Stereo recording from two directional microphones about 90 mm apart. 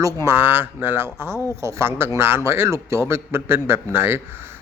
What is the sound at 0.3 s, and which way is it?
A man's voice, 25° right (ahead or behind).